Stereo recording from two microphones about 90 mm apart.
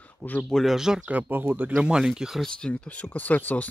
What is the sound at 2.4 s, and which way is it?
Speech, 10° left (ahead or behind).